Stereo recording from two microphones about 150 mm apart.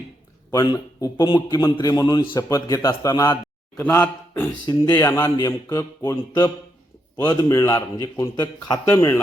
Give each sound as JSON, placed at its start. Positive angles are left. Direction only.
{"t": 0.5, "sound": "a man's voice", "side_deg": 25}
{"t": 5.5, "sound": "a man's voice", "side_deg": 30}